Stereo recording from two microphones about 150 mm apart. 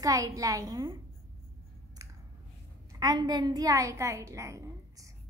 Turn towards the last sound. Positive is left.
turn(degrees=-20)  # may be behind; listen again after turning